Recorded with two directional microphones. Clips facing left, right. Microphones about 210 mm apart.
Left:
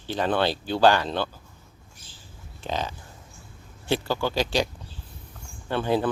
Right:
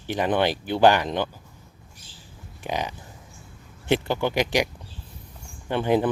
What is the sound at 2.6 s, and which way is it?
Speech, 15° right (ahead or behind).